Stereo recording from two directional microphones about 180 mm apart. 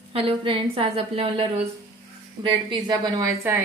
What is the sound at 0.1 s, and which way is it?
A woman's voice, 30° right (ahead or behind).